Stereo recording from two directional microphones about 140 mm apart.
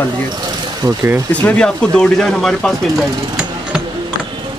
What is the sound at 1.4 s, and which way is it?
Speech, 10° left (ahead or behind).